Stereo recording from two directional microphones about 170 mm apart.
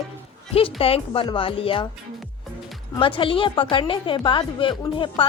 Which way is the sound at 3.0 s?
30° left (ahead or behind).